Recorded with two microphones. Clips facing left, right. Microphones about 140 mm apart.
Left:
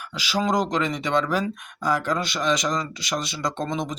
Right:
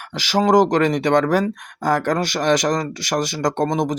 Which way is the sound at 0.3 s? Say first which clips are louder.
Right 8 dB; 55° right (ahead or behind).